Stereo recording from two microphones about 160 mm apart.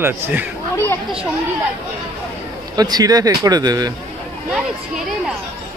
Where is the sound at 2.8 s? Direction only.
25° right (ahead or behind).